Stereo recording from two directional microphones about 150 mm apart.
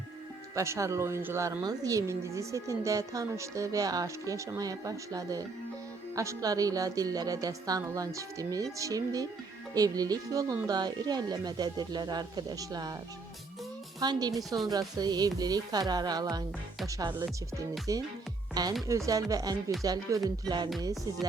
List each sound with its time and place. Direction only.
0.5 s speech: 20° right (ahead or behind)
14.0 s speech: 25° right (ahead or behind)